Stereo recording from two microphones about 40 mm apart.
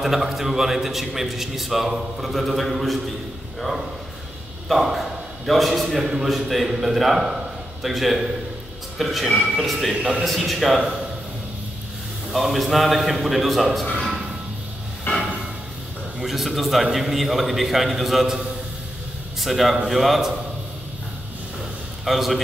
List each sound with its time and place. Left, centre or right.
0.0 s a man's voice: centre
4.6 s a man's voice: centre
12.3 s a man's voice: centre
15.1 s a sound: left
16.2 s a man's voice: centre
19.4 s a man's voice: centre
22.0 s a man's voice: centre